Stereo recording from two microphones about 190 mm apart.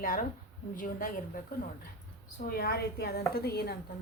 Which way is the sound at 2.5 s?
55° left (ahead or behind).